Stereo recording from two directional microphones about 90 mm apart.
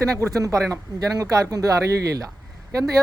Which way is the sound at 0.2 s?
40° right (ahead or behind).